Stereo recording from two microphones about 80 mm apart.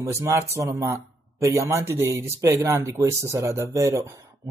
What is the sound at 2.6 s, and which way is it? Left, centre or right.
A man's voice, right.